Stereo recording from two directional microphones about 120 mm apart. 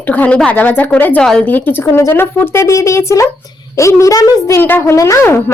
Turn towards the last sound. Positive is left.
turn(degrees=25)  # may be behind; listen again after turning